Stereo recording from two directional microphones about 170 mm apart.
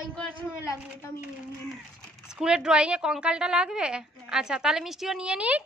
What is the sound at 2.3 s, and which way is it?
A woman's voice, 5° right (ahead or behind).